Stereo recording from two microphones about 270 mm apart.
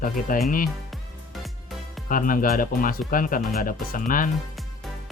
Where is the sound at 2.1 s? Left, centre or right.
Left.